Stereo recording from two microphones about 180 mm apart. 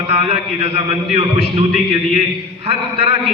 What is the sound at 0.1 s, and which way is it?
A man's voice, 35° right (ahead or behind).